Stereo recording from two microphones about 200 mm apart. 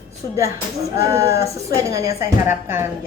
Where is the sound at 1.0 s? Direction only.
15° right (ahead or behind).